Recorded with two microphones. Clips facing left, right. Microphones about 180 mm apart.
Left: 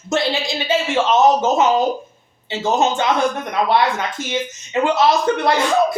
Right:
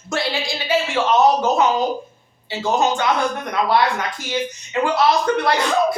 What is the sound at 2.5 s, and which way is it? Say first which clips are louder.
Speech: left 1 dB; 20° left (ahead or behind).